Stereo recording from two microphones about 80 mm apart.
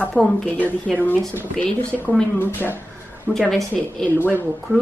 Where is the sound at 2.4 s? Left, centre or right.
Left.